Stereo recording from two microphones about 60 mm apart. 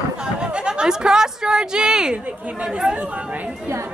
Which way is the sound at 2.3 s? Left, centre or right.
Right.